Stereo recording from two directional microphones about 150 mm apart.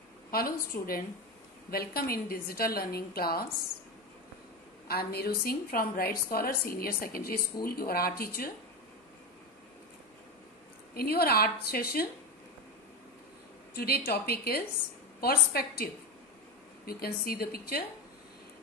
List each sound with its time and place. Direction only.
0.3 s a woman's voice: 80° left
1.7 s a woman's voice: 85° left
4.8 s a woman's voice: 90° left
7.6 s a woman's voice: 90° left
11.0 s a woman's voice: 90° left
13.7 s a woman's voice: 90° left